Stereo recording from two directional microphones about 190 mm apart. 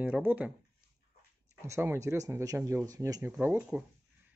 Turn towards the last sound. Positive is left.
turn(degrees=-10)  # may be behind; listen again after turning